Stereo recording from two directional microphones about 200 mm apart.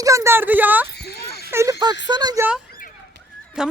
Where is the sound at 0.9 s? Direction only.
55° left (ahead or behind).